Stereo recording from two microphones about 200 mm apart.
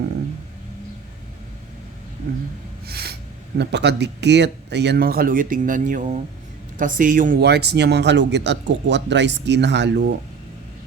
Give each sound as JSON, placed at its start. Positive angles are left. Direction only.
{"t": 2.8, "sound": "snort", "side_deg": -50}
{"t": 3.6, "sound": "a man's voice", "side_deg": -60}